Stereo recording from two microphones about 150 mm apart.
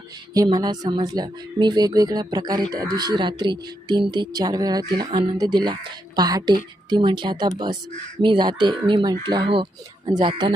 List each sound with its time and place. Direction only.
0.3 s speech: 25° right (ahead or behind)